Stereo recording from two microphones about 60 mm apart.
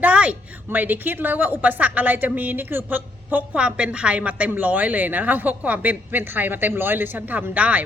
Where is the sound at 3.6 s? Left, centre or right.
Centre.